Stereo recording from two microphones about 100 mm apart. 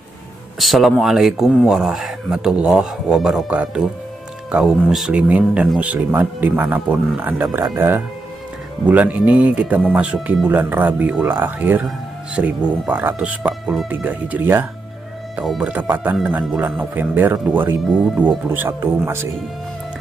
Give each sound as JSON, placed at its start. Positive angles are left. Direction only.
{"t": 0.6, "sound": "speech", "side_deg": 0}
{"t": 15.4, "sound": "speech", "side_deg": -5}
{"t": 15.7, "sound": "speech", "side_deg": -15}
{"t": 18.5, "sound": "speech", "side_deg": -20}